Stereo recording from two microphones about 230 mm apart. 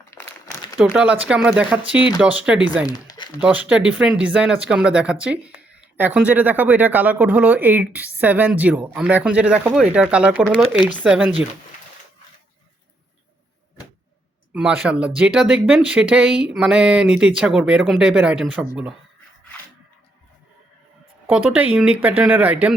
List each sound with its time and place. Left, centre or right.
0.1 s crumpling: centre
0.8 s speech: centre
2.9 s crumpling: centre
3.4 s speech: centre
14.5 s speech: centre
21.2 s speech: centre